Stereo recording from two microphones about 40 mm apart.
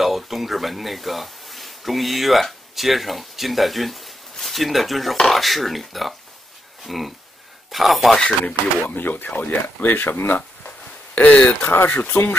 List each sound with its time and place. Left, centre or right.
0.0 s speech: centre
8.8 s speech: left
9.8 s speech: left
11.6 s speech: left